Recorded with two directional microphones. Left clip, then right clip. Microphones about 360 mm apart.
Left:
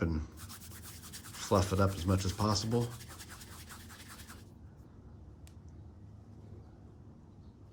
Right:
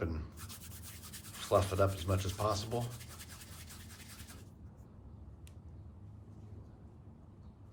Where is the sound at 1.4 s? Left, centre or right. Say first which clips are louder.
Even; left.